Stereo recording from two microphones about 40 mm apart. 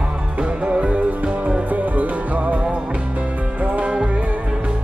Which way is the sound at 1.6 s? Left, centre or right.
Right.